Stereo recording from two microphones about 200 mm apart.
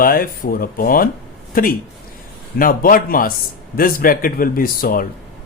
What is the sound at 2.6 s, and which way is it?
Speech, 45° left (ahead or behind).